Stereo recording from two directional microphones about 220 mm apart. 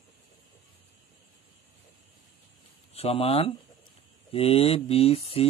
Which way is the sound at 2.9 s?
25° left (ahead or behind).